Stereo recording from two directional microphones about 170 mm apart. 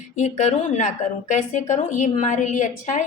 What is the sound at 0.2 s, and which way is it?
A woman's voice, 45° left (ahead or behind).